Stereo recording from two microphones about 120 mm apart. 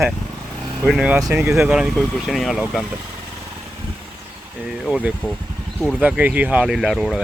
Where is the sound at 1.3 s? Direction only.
20° right (ahead or behind).